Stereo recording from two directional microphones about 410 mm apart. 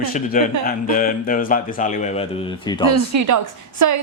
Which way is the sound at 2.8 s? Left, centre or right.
Right.